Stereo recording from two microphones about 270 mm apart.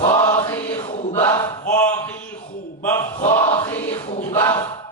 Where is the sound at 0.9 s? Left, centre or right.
Left.